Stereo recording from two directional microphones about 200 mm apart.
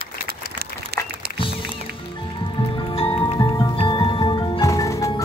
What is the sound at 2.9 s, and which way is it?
Music, 25° left (ahead or behind).